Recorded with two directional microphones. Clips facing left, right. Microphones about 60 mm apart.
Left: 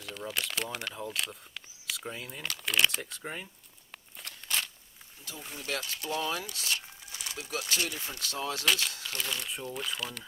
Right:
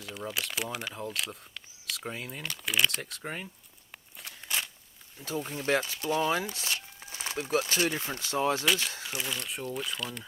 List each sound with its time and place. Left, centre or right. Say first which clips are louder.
0.0 s speech: right 1 dB; centre
2.0 s speech: right 4 dB; centre
2.4 s speech: left 1 dB; centre
4.2 s crunch: even; centre
5.2 s speech: right 9 dB; right
8.6 s speech: right 1 dB; centre
8.9 s speech: right 1 dB; right
9.3 s speech: right 2 dB; centre